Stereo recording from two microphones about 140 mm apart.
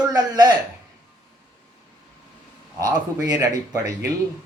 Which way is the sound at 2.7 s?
25° right (ahead or behind).